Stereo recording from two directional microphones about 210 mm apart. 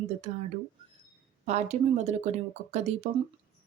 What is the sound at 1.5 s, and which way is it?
Speech, 35° right (ahead or behind).